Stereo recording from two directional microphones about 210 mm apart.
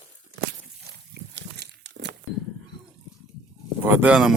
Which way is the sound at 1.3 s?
55° right (ahead or behind).